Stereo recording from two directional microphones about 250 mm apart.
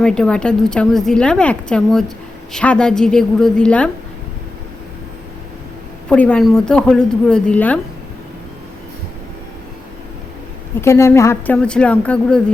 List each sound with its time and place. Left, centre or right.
0.0 s a woman's voice: centre
6.1 s a woman's voice: centre
10.8 s a woman's voice: centre